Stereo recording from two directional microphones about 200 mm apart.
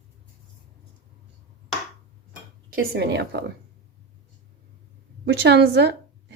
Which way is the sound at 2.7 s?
55° right (ahead or behind).